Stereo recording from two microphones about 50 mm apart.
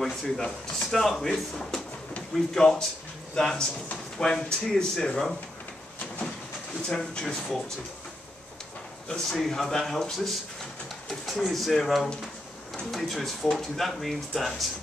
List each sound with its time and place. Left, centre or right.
0.0 s speech: centre
6.9 s speech: centre
9.1 s speech: centre
11.4 s speech: centre